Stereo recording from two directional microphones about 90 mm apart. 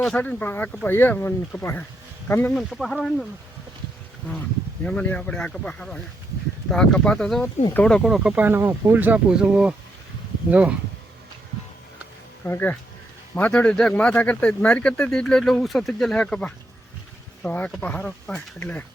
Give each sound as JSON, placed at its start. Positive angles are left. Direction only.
{"t": 0.2, "sound": "speech", "side_deg": 20}
{"t": 2.6, "sound": "speech", "side_deg": 5}
{"t": 4.8, "sound": "speech", "side_deg": 10}
{"t": 8.1, "sound": "speech", "side_deg": -10}
{"t": 8.4, "sound": "speech", "side_deg": -20}
{"t": 9.3, "sound": "speech", "side_deg": -10}
{"t": 12.5, "sound": "speech", "side_deg": 25}